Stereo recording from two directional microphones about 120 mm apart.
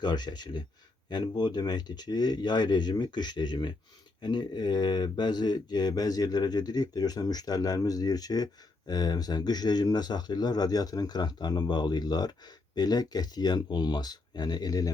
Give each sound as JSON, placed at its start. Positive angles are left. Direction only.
{"t": 0.0, "sound": "speech", "side_deg": 35}